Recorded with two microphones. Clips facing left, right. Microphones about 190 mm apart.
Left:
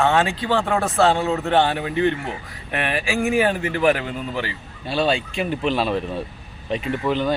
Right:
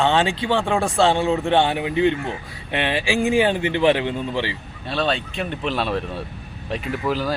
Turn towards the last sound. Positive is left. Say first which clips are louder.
# left 2 dB
turn(degrees=-5)  # may be behind; listen again after turning